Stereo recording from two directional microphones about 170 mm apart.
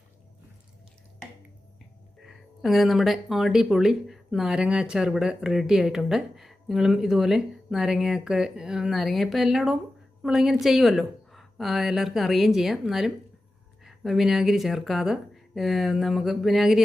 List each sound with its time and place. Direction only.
2.2 s speech: centre (ahead or behind)